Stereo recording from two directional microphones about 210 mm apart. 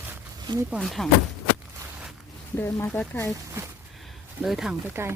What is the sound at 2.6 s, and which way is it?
Speech, 10° left (ahead or behind).